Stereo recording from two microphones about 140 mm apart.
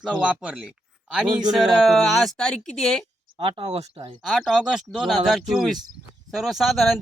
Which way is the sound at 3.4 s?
40° right (ahead or behind).